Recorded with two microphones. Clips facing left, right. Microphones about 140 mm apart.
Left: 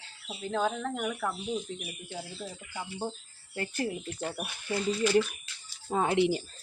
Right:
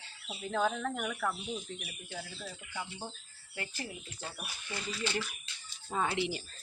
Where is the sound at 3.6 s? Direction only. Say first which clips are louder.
Left 9 dB; 60° left (ahead or behind).